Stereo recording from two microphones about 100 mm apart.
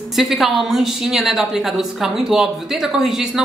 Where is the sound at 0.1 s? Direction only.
Centre (ahead or behind).